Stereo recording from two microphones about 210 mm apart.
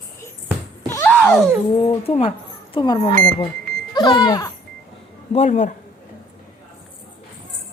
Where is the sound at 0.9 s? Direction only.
10° left (ahead or behind).